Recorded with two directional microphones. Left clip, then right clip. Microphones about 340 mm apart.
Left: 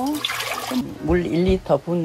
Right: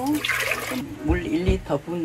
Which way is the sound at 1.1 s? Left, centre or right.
Left.